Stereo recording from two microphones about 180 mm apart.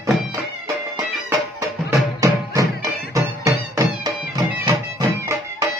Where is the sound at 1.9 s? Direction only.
20° right (ahead or behind).